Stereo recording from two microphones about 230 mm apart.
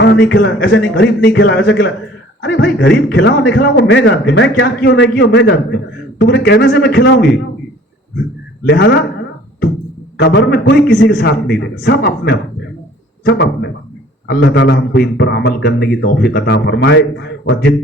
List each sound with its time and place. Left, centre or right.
0.0 s a man's voice: left
8.6 s a man's voice: left
10.2 s a man's voice: left